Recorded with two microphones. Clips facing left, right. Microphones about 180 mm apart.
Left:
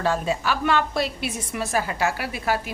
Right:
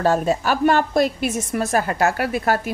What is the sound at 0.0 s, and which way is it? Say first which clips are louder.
A woman's voice: right 5 dB; 45° right (ahead or behind).